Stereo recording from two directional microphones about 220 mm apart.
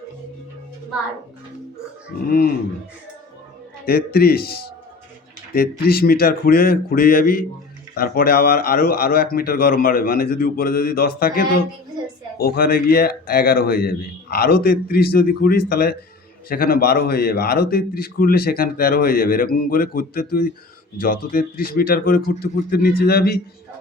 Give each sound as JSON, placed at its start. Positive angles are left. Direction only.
{"t": 2.2, "sound": "speech", "side_deg": 40}
{"t": 3.8, "sound": "a man's voice", "side_deg": 45}